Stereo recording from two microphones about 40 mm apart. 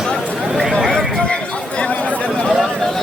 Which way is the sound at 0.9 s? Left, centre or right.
Centre.